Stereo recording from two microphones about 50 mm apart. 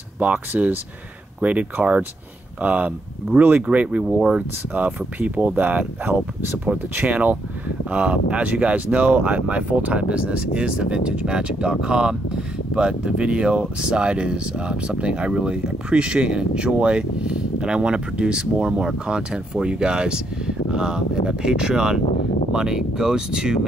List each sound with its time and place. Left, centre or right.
0.2 s speech: right
4.0 s speech: centre
4.7 s speech: right